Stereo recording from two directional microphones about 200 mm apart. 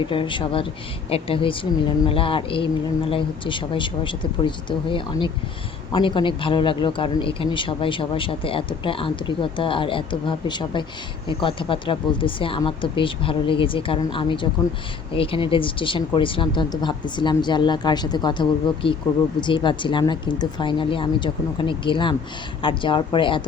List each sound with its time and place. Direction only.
0.1 s speech: 25° left (ahead or behind)